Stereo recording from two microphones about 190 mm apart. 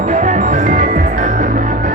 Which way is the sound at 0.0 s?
40° right (ahead or behind).